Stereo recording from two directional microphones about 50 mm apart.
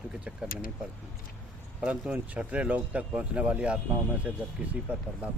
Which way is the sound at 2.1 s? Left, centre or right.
Centre.